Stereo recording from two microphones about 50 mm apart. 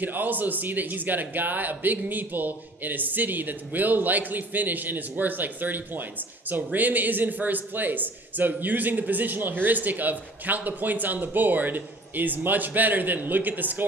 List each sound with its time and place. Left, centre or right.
0.0 s speech: right